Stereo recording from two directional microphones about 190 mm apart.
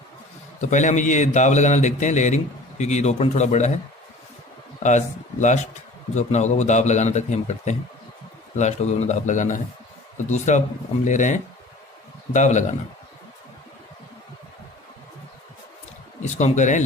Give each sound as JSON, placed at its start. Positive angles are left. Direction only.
{"t": 0.6, "sound": "a man's voice", "side_deg": 40}
{"t": 4.8, "sound": "a man's voice", "side_deg": 40}
{"t": 16.2, "sound": "speech", "side_deg": 40}